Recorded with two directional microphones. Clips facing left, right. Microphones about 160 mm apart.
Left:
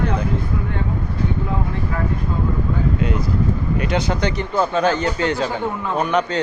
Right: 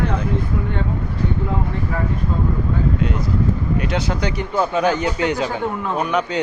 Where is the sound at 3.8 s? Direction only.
Centre (ahead or behind).